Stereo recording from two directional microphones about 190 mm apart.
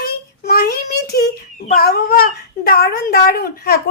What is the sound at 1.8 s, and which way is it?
Speech, 55° left (ahead or behind).